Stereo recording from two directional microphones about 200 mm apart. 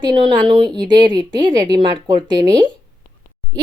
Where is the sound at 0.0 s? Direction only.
25° right (ahead or behind).